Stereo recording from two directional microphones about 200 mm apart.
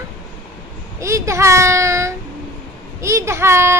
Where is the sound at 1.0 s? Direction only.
15° right (ahead or behind).